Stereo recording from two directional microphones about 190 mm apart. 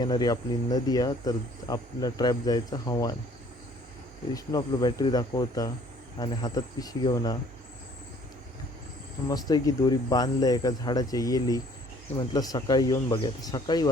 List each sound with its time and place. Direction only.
0.0 s speech: 20° left (ahead or behind)
4.4 s speech: 20° left (ahead or behind)
9.3 s speech: 20° left (ahead or behind)